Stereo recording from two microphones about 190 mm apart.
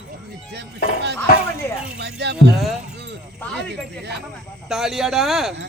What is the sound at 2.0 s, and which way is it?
Music, 60° right (ahead or behind).